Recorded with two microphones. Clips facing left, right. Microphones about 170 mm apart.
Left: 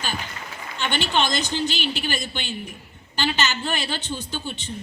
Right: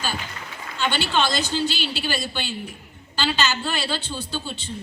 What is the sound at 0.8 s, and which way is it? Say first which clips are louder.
A woman's voice: right 1 dB; 20° left (ahead or behind).